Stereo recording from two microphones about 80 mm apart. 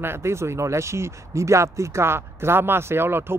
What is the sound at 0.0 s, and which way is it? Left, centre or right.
Speech, right.